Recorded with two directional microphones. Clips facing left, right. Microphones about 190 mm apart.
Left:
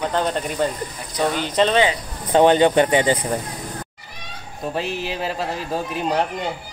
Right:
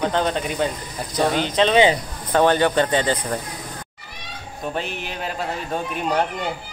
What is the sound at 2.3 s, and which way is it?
Speech, 20° left (ahead or behind).